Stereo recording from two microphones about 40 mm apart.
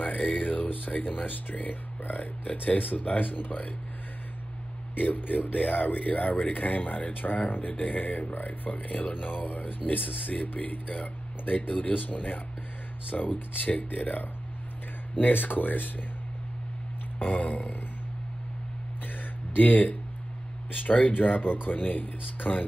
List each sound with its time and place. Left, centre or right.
0.0 s speech: left
4.9 s speech: left
17.2 s burping: left
19.0 s a sound: left
20.7 s speech: left